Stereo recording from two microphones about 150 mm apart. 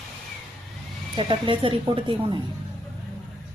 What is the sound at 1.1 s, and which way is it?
A woman's voice, 35° right (ahead or behind).